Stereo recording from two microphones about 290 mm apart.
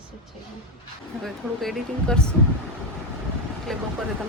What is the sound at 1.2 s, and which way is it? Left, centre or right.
Speech, centre.